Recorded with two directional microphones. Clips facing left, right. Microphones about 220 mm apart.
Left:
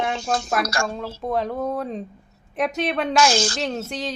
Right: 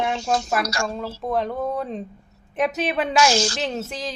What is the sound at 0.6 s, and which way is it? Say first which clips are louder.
Speech: left 1 dB; 50° left (ahead or behind).